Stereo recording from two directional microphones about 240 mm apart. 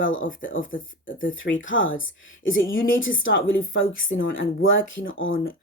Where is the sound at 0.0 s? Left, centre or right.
Left.